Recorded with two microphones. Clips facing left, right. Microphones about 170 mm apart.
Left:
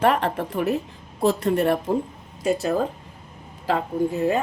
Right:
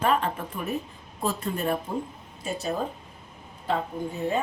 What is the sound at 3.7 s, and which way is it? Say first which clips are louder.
Speech: left 6 dB; 80° left.